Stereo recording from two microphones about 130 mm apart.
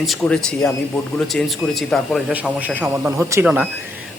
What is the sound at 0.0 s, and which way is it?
Speech, centre (ahead or behind).